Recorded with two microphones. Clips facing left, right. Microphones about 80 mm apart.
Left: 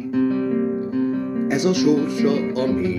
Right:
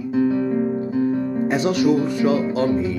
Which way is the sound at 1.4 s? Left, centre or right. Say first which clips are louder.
Left 1 dB; right.